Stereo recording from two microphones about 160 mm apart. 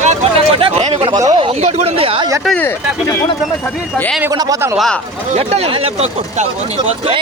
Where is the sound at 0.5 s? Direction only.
35° right (ahead or behind).